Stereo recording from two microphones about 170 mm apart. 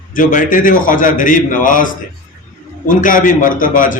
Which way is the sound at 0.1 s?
55° left (ahead or behind).